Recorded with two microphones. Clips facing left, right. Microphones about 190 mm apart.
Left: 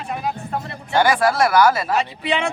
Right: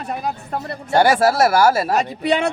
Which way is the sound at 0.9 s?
40° right (ahead or behind).